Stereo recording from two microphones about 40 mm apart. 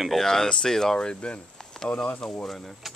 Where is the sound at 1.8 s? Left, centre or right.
Left.